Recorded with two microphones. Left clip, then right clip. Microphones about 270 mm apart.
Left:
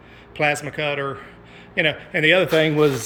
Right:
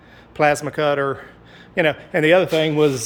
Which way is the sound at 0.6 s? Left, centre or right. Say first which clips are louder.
Right 5 dB; right.